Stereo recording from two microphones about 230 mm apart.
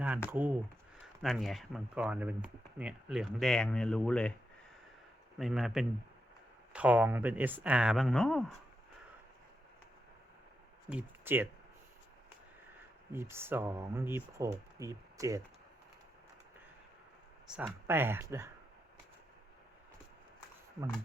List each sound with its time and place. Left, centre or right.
0.3 s speech: centre
5.4 s speech: centre
10.8 s speech: centre
13.1 s speech: centre
17.5 s speech: centre